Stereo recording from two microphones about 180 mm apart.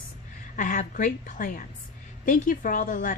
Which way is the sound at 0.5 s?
45° left (ahead or behind).